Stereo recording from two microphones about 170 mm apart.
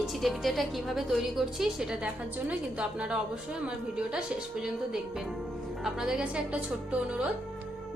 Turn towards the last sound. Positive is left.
turn(degrees=-5)  # may be behind; listen again after turning